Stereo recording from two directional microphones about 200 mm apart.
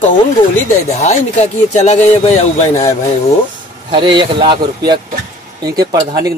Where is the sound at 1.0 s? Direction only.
35° left (ahead or behind).